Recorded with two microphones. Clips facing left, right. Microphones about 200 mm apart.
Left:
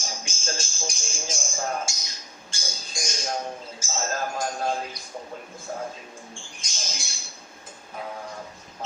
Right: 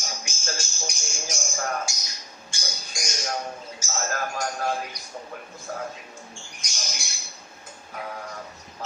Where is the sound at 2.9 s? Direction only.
25° left (ahead or behind).